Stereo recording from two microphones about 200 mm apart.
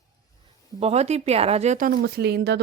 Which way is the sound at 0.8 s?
30° right (ahead or behind).